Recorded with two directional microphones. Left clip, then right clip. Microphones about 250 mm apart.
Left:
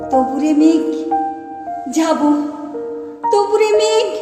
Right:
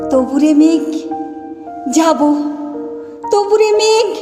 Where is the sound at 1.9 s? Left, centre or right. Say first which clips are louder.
Right 5 dB; right.